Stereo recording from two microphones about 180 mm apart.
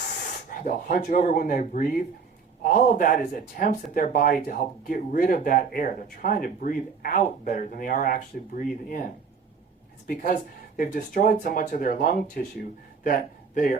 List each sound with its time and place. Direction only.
0.6 s speech: 50° left (ahead or behind)
10.8 s speech: 50° left (ahead or behind)